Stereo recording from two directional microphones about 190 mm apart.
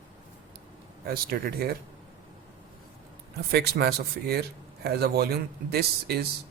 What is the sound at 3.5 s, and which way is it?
Speech, 55° right (ahead or behind).